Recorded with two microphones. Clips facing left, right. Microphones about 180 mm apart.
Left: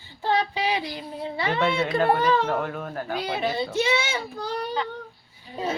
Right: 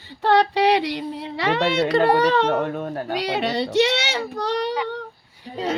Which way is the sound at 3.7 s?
75° right (ahead or behind).